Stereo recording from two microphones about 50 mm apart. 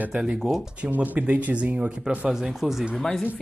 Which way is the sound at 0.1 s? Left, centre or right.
Right.